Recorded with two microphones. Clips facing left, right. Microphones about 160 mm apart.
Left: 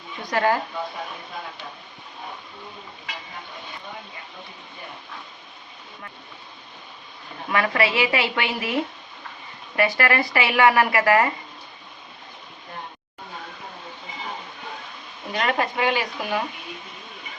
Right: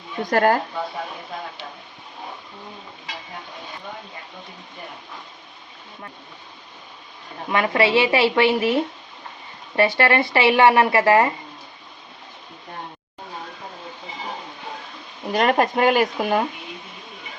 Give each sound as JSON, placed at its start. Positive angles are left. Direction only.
{"t": 0.2, "sound": "speech", "side_deg": -50}
{"t": 7.5, "sound": "speech", "side_deg": -25}
{"t": 15.3, "sound": "speech", "side_deg": -45}